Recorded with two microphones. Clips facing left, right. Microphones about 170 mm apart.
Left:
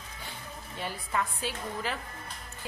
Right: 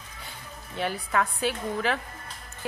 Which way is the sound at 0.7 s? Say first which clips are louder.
Right 6 dB; 70° right (ahead or behind).